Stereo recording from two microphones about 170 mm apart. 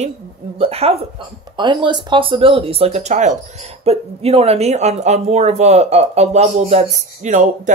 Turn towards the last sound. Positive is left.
turn(degrees=-45)  # may be behind; listen again after turning